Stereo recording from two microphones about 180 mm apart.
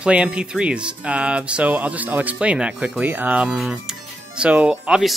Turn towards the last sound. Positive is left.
turn(degrees=-5)  # may be behind; listen again after turning